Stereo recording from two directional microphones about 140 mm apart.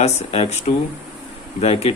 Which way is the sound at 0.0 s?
50° left (ahead or behind).